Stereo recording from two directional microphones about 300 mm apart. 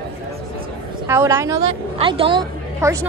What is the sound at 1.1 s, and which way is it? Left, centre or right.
A woman's voice, centre.